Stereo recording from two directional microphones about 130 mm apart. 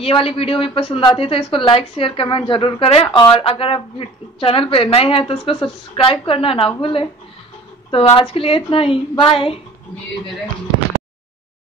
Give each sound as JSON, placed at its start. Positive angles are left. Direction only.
{"t": 0.0, "sound": "a woman's voice", "side_deg": 45}
{"t": 8.0, "sound": "a woman's voice", "side_deg": 30}
{"t": 8.3, "sound": "a woman's voice", "side_deg": 45}